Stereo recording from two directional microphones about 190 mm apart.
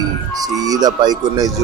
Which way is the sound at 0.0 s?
20° right (ahead or behind).